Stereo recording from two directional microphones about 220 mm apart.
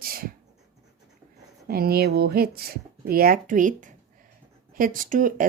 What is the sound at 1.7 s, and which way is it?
A woman's voice, 45° right (ahead or behind).